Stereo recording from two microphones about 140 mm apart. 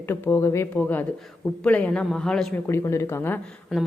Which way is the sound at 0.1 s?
20° left (ahead or behind).